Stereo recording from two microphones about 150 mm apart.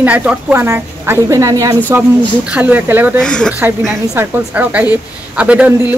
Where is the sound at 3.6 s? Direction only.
15° right (ahead or behind).